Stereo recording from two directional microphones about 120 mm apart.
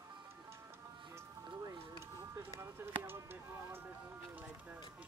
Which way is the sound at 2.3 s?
20° right (ahead or behind).